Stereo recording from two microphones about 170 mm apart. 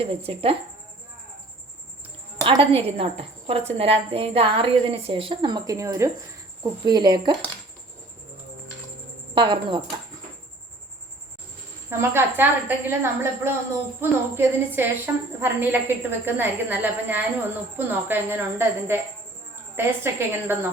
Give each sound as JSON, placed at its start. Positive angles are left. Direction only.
{"t": 0.0, "sound": "a woman's voice", "side_deg": -35}
{"t": 2.5, "sound": "a woman's voice", "side_deg": -35}
{"t": 9.3, "sound": "speech", "side_deg": -30}
{"t": 11.9, "sound": "a woman's voice", "side_deg": -15}